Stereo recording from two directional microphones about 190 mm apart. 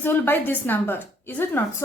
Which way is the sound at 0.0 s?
10° left (ahead or behind).